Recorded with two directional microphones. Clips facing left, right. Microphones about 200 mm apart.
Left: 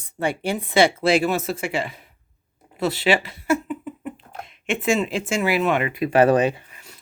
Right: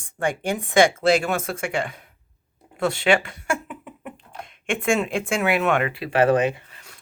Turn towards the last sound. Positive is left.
turn(degrees=-30)  # may be behind; listen again after turning